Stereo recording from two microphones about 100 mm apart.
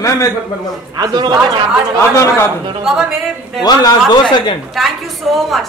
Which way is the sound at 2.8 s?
5° right (ahead or behind).